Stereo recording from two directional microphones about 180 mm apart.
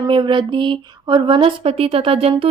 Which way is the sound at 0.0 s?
25° right (ahead or behind).